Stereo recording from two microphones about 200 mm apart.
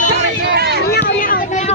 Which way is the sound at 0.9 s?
50° left (ahead or behind).